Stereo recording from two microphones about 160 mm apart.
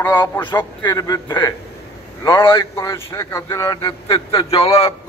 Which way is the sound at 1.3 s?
15° left (ahead or behind).